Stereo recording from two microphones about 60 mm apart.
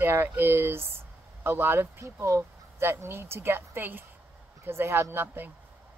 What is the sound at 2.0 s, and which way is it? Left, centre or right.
A woman's voice, right.